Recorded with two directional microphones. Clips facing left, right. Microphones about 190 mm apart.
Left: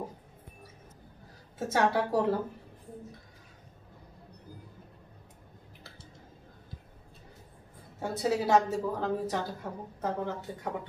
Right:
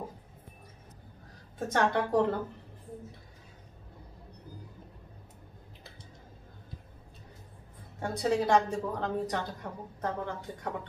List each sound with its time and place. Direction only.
1.6 s a woman's voice: 5° left (ahead or behind)
8.0 s a woman's voice: 5° left (ahead or behind)